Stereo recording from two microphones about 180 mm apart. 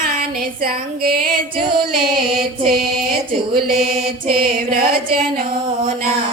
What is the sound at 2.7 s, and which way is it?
Music, 60° right (ahead or behind).